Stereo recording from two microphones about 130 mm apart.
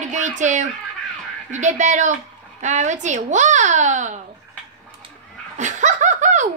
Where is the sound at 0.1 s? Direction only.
70° right (ahead or behind).